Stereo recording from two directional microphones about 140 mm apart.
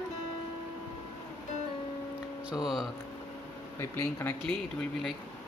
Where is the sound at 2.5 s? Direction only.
Centre (ahead or behind).